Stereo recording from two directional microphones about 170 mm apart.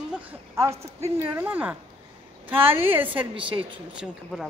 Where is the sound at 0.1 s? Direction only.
10° right (ahead or behind).